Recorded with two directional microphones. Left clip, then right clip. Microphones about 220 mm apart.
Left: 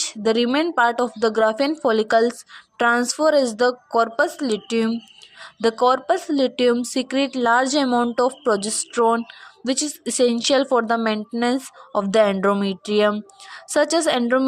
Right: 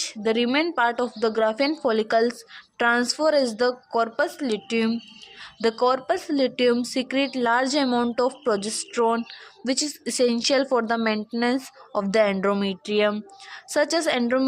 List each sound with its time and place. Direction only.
0.0 s speech: 20° left (ahead or behind)